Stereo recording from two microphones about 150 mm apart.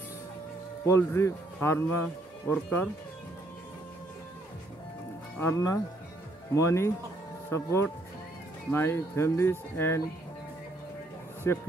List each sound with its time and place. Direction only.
0.8 s speech: 20° left (ahead or behind)
5.4 s speech: 20° left (ahead or behind)
11.4 s speech: 15° left (ahead or behind)